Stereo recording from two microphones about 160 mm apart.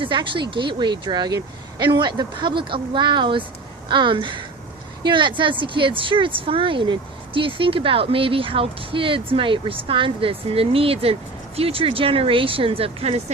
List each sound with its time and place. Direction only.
0.0 s speech: 30° right (ahead or behind)